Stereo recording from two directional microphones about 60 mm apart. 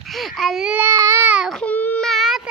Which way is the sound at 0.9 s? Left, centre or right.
Right.